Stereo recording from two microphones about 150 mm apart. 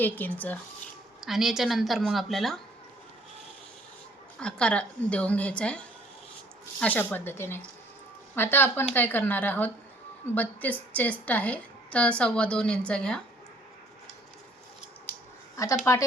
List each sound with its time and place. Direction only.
0.0 s a woman's voice: 10° left (ahead or behind)
1.2 s a woman's voice: centre (ahead or behind)
4.4 s a woman's voice: 5° left (ahead or behind)
15.5 s speech: 20° left (ahead or behind)